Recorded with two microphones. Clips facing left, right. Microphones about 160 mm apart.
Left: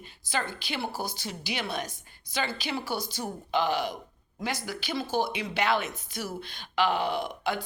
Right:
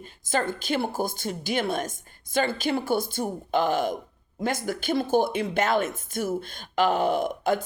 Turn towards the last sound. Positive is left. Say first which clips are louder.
# right 6 dB
turn(degrees=-45)  # may be behind; listen again after turning